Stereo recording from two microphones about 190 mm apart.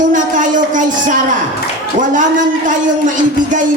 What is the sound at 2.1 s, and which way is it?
Speech, 45° right (ahead or behind).